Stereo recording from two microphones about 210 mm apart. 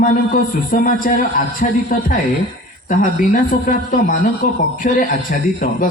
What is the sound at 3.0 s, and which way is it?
A man's voice, 40° left (ahead or behind).